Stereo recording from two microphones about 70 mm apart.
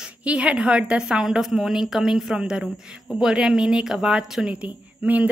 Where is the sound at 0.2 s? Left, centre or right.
Centre.